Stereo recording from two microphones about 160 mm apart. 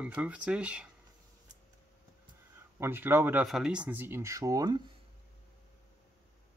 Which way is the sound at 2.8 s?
15° right (ahead or behind).